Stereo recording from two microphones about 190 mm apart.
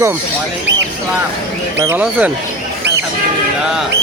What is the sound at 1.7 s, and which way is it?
Speech, 15° right (ahead or behind).